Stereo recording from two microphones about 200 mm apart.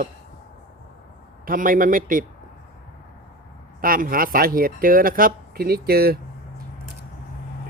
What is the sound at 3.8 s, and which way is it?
Speech, 45° right (ahead or behind).